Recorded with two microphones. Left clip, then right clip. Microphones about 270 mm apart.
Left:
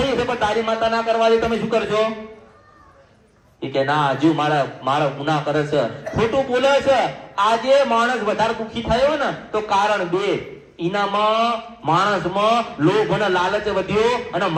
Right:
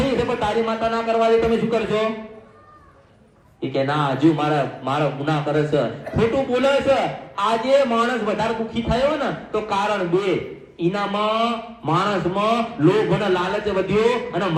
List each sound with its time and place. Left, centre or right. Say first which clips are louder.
0.3 s a man's voice: left 1 dB; left
3.6 s a man's voice: left 3 dB; left